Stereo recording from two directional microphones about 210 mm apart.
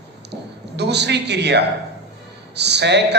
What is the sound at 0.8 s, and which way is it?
Speech, 55° right (ahead or behind).